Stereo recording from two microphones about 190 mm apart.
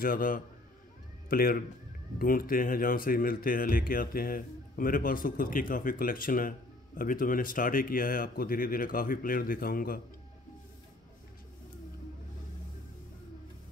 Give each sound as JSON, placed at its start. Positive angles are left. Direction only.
{"t": 0.0, "sound": "speech", "side_deg": 45}